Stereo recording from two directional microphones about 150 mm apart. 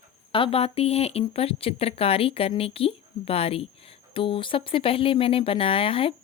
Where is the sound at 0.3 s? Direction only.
35° left (ahead or behind).